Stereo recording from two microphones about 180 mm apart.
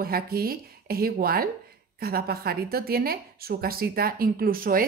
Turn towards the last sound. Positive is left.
turn(degrees=-55)  # may be behind; listen again after turning